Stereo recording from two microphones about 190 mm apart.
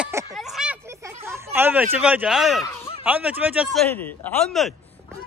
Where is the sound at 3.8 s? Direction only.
5° left (ahead or behind).